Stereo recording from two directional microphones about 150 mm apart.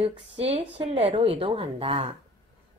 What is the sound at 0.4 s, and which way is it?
A woman's voice, 40° right (ahead or behind).